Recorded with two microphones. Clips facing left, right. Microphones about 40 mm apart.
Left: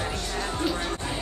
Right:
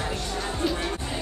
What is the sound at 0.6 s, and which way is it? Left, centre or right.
Music, centre.